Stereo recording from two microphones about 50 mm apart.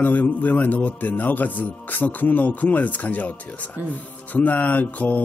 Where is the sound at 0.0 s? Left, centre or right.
Left.